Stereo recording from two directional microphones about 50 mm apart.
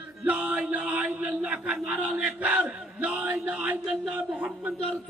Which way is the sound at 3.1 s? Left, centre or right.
Right.